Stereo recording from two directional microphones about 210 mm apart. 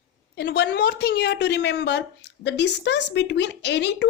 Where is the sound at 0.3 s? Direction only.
50° left (ahead or behind).